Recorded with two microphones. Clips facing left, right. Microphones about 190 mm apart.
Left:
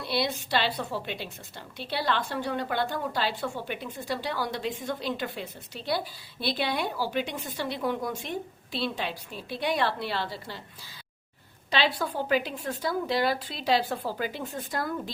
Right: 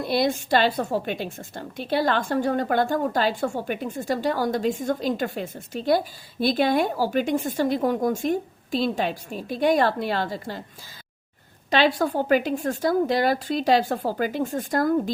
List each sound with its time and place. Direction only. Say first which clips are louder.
0.0 s a woman's voice: right 7 dB; 45° right (ahead or behind)
11.7 s a woman's voice: right 7 dB; 45° right (ahead or behind)